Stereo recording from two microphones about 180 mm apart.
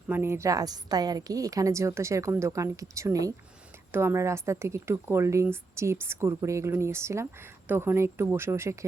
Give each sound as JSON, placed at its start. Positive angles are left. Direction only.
{"t": 0.1, "sound": "a woman's voice", "side_deg": -15}